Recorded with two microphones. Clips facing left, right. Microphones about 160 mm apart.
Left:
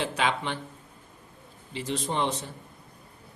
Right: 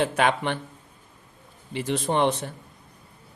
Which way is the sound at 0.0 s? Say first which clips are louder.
Right 5 dB; 55° right (ahead or behind).